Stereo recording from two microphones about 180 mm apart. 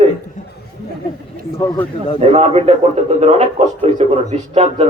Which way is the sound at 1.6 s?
15° left (ahead or behind).